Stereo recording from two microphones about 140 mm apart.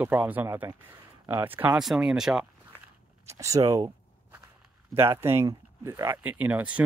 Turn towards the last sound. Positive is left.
turn(degrees=-10)  # may be behind; listen again after turning